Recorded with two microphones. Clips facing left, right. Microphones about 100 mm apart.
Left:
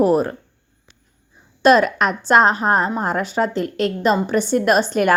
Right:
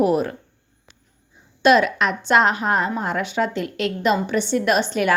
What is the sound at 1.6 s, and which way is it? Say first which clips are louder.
A woman's voice: left 2 dB; 40° left (ahead or behind).